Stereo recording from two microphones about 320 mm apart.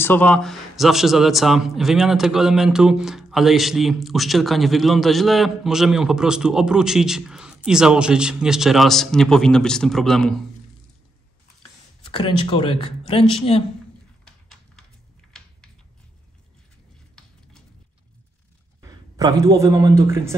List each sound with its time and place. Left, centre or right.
0.0 s a man's voice: centre
12.1 s speech: centre
14.2 s a sound: centre
18.8 s a man's voice: centre